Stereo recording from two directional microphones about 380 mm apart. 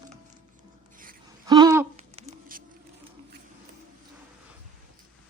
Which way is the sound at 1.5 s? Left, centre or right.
Centre.